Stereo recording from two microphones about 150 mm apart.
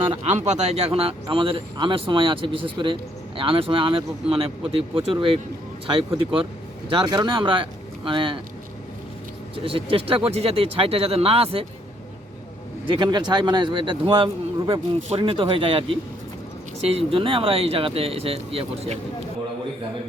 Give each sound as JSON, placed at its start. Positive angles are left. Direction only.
{"t": 0.1, "sound": "speech", "side_deg": -50}
{"t": 9.6, "sound": "speech", "side_deg": -35}
{"t": 12.9, "sound": "speech", "side_deg": -30}